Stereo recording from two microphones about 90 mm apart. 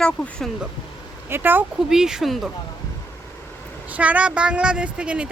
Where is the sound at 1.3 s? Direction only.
25° right (ahead or behind).